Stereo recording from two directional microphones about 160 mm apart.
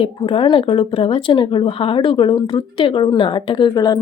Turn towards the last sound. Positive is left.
turn(degrees=25)  # may be behind; listen again after turning